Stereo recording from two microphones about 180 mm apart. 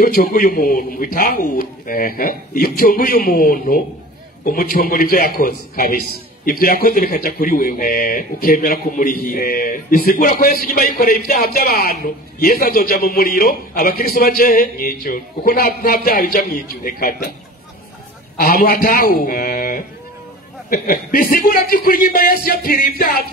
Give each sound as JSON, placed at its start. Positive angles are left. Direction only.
{"t": 0.0, "sound": "a man's voice", "side_deg": 55}
{"t": 18.4, "sound": "a man's voice", "side_deg": 55}